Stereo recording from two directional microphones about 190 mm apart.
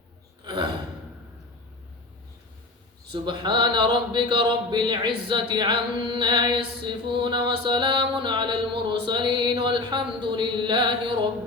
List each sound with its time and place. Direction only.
0.4 s gasp: 25° right (ahead or behind)
3.1 s speech: 25° right (ahead or behind)
9.0 s mantra: 25° right (ahead or behind)